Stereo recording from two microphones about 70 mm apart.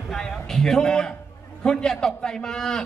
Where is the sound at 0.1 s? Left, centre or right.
Centre.